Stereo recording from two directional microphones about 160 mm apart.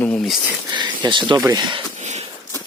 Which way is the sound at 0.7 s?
30° right (ahead or behind).